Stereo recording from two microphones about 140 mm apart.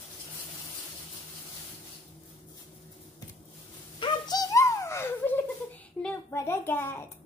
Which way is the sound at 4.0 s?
25° left (ahead or behind).